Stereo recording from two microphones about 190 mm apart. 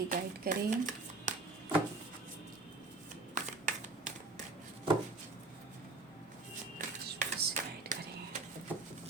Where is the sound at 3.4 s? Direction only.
40° right (ahead or behind).